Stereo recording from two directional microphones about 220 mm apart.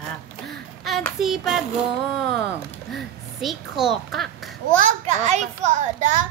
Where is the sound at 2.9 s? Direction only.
Centre (ahead or behind).